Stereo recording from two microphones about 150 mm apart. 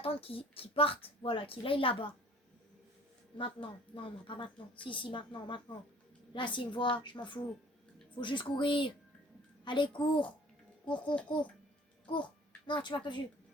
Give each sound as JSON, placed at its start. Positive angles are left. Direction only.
{"t": 0.0, "sound": "a woman's voice", "side_deg": 40}
{"t": 3.3, "sound": "a woman's voice", "side_deg": 35}
{"t": 11.1, "sound": "a child's voice", "side_deg": 10}
{"t": 12.6, "sound": "a woman's voice", "side_deg": 30}